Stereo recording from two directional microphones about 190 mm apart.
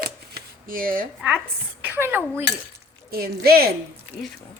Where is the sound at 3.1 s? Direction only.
55° right (ahead or behind).